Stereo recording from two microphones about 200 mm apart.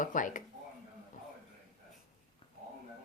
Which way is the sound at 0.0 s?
40° left (ahead or behind).